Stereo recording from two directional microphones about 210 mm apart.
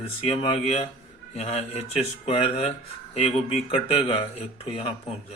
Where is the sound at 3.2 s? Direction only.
30° left (ahead or behind).